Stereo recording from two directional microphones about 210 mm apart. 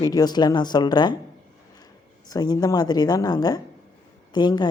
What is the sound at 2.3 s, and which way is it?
A woman's voice, 20° left (ahead or behind).